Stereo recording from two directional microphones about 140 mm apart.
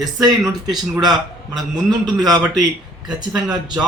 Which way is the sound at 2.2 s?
30° right (ahead or behind).